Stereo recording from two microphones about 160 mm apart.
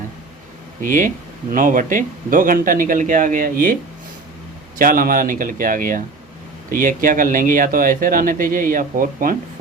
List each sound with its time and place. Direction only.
0.8 s speech: 55° right (ahead or behind)
4.8 s speech: 60° right (ahead or behind)